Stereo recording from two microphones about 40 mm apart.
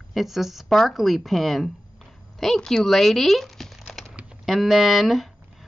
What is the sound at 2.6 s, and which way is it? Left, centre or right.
A woman's voice, centre.